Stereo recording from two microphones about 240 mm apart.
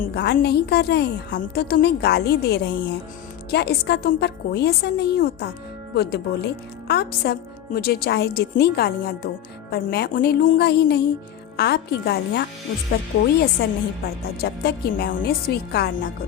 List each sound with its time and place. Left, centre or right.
0.0 s a woman's voice: left